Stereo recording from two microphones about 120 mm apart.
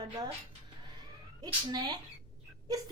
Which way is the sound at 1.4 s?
35° right (ahead or behind).